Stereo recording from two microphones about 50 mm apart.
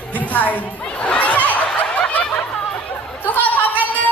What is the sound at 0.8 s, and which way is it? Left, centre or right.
Snicker, left.